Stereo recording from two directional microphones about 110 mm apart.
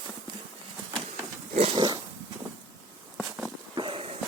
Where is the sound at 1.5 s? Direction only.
65° right (ahead or behind).